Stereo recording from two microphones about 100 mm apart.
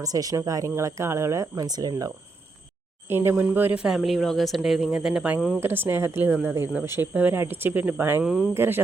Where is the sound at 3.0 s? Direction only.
25° right (ahead or behind); by 5.6 s centre (ahead or behind).